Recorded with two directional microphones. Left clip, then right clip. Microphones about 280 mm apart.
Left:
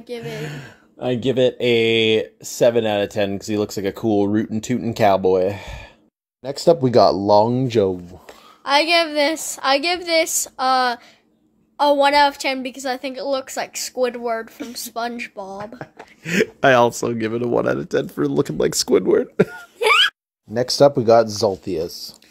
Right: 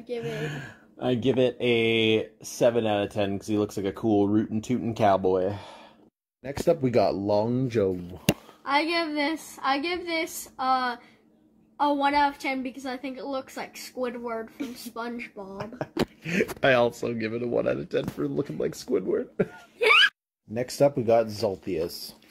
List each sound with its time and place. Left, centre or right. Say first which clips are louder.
0.0 s speech: left 2 dB; left
8.6 s speech: left 9 dB; left
19.8 s a sound: left 4 dB; centre
20.5 s speech: left 9 dB; left